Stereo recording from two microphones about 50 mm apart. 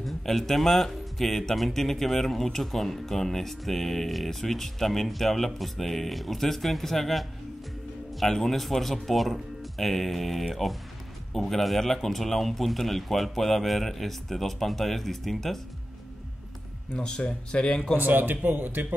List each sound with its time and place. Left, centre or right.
0.0 s speech: centre
16.9 s speech: left
17.9 s speech: right